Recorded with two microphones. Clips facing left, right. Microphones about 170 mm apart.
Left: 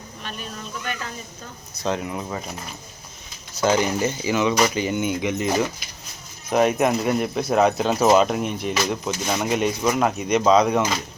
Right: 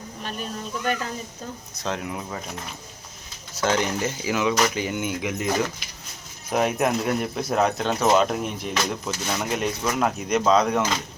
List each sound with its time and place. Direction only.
0.2 s a sound: 40° right (ahead or behind)
1.8 s speech: centre (ahead or behind)
9.0 s speech: 15° left (ahead or behind)
9.4 s speech: 5° left (ahead or behind)